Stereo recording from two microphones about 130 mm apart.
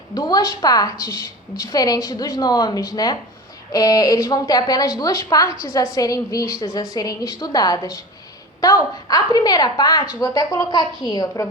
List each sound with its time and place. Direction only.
0.1 s a woman's voice: 30° left (ahead or behind)